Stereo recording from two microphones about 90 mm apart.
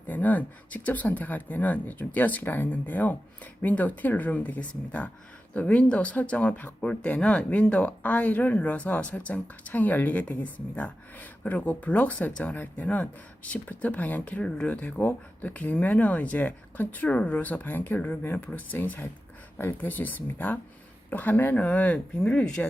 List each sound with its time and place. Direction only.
0.1 s speech: 20° left (ahead or behind)